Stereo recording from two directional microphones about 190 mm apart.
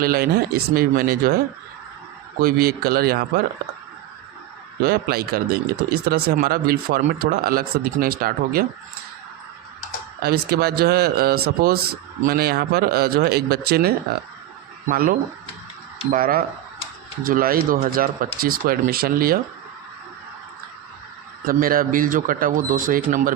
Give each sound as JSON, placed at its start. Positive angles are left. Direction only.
{"t": 0.0, "sound": "speech", "side_deg": -55}
{"t": 2.4, "sound": "speech", "side_deg": -50}
{"t": 4.8, "sound": "speech", "side_deg": -55}
{"t": 10.2, "sound": "speech", "side_deg": -55}
{"t": 16.1, "sound": "speech", "side_deg": -50}
{"t": 21.4, "sound": "speech", "side_deg": -50}